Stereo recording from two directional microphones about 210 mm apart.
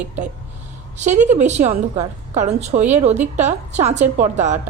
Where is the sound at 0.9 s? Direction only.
35° right (ahead or behind).